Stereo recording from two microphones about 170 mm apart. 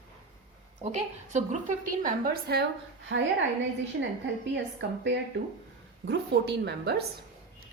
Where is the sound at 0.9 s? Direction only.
45° right (ahead or behind); by 2.6 s 65° right (ahead or behind).